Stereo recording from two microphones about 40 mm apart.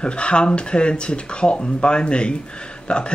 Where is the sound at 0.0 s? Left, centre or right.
Left.